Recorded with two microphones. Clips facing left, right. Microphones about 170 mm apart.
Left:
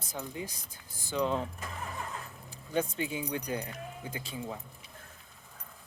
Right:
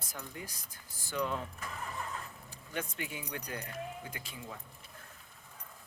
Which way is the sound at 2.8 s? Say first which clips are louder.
Left 8 dB; 30° left (ahead or behind).